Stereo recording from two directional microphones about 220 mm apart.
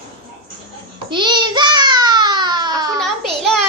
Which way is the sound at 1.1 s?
20° right (ahead or behind).